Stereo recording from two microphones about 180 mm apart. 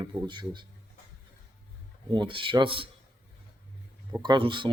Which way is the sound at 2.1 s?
25° right (ahead or behind).